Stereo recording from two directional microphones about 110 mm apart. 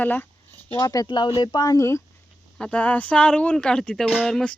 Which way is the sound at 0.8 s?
30° left (ahead or behind).